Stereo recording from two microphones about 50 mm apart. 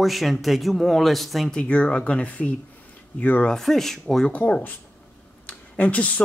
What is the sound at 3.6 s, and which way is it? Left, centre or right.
Speech, centre.